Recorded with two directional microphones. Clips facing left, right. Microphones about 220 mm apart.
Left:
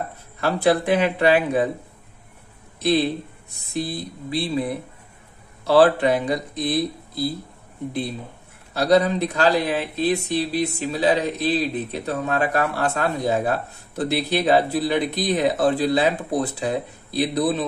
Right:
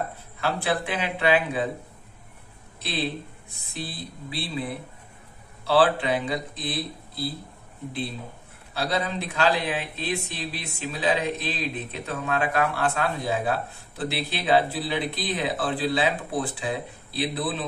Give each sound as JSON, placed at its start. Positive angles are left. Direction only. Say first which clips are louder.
{"t": 0.4, "sound": "speech", "louder": "left 7 dB", "side_deg": 45}
{"t": 3.7, "sound": "speech", "louder": "left 9 dB", "side_deg": 45}
{"t": 5.7, "sound": "speech", "louder": "left 5 dB", "side_deg": 45}
{"t": 8.7, "sound": "speech", "louder": "left 9 dB", "side_deg": 45}